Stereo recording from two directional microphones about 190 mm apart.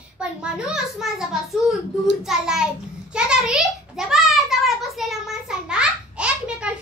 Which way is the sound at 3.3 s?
5° right (ahead or behind).